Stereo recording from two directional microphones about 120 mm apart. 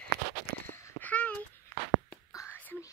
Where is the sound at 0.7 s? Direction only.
20° left (ahead or behind).